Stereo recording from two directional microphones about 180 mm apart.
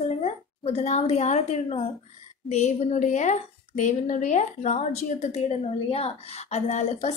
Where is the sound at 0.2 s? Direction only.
35° left (ahead or behind).